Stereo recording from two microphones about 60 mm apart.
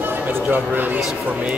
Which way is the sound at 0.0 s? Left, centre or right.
Right.